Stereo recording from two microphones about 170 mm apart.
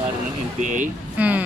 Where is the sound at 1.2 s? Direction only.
10° right (ahead or behind).